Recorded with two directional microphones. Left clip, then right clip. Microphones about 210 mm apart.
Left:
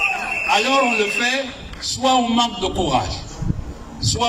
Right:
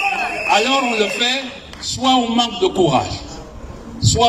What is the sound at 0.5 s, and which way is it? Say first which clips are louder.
A man's voice: right 1 dB; 15° right (ahead or behind).